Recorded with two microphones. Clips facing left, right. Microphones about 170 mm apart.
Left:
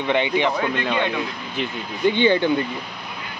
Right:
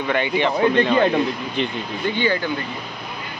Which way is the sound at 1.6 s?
20° left (ahead or behind).